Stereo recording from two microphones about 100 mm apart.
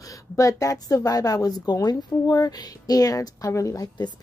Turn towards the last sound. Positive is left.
turn(degrees=35)  # may be behind; listen again after turning